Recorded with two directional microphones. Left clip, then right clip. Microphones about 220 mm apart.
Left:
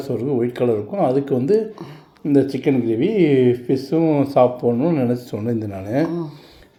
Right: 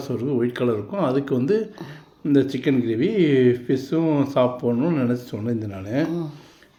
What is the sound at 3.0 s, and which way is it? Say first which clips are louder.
Speech: left 3 dB; 40° right (ahead or behind).